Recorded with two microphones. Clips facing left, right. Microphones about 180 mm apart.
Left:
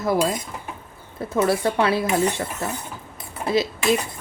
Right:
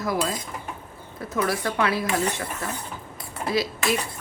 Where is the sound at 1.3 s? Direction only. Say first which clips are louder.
Left 5 dB; 25° left (ahead or behind).